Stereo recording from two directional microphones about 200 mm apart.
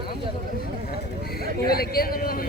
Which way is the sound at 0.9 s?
50° left (ahead or behind).